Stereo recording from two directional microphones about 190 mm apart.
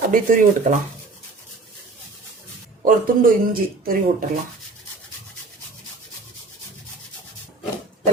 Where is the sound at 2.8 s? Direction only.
50° right (ahead or behind).